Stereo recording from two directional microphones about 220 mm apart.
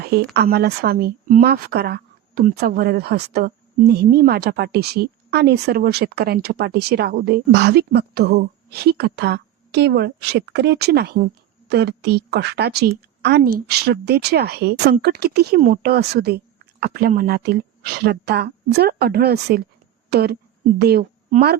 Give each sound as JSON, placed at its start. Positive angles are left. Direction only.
{"t": 0.0, "sound": "a sound", "side_deg": -45}
{"t": 0.3, "sound": "speech", "side_deg": -45}
{"t": 21.2, "sound": "speech", "side_deg": -35}